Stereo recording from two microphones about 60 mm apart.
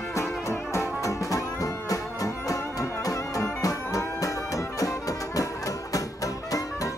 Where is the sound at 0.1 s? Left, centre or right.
Left.